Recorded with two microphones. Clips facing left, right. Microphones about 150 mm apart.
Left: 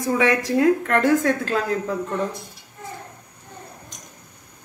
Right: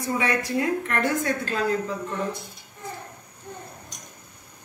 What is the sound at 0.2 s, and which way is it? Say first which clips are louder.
A woman's voice: left 8 dB; 75° left (ahead or behind).